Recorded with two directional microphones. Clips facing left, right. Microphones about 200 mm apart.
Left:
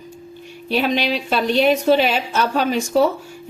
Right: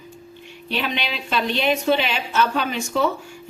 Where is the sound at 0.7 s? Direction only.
40° left (ahead or behind).